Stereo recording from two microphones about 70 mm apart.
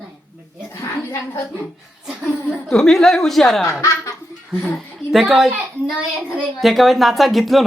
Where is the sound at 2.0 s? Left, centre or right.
Centre.